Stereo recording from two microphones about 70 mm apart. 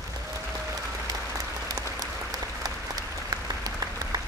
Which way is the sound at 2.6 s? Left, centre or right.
Right.